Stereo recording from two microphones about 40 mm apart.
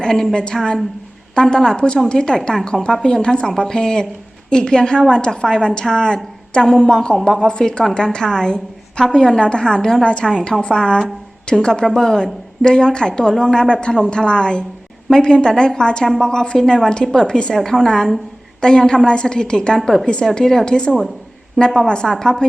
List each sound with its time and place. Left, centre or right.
0.0 s a woman's voice: centre